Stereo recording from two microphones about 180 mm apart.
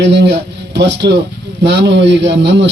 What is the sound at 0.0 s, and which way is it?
A man's voice, 75° right (ahead or behind).